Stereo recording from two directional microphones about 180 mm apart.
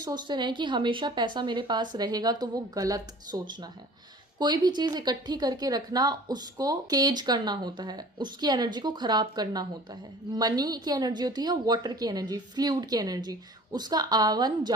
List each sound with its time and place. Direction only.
0.0 s speech: 25° right (ahead or behind)